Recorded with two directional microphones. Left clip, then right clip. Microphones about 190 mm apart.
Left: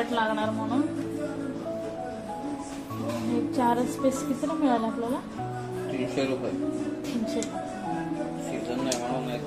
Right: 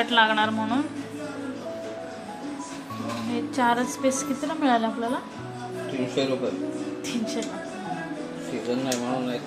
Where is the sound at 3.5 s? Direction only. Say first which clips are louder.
Right 3 dB; 5° left (ahead or behind).